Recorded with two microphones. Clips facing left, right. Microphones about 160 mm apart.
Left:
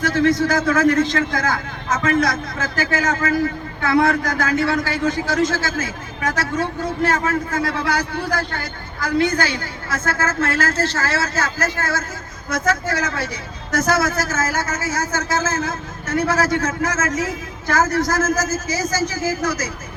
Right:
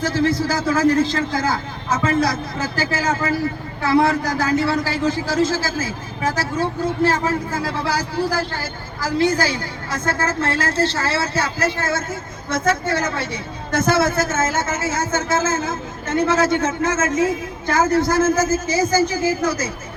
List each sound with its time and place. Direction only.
0.0 s a man's voice: 30° right (ahead or behind)
9.0 s a man's voice: 30° right (ahead or behind)